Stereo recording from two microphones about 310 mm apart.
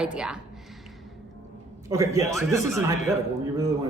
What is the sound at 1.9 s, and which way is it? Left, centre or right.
A man's voice, centre.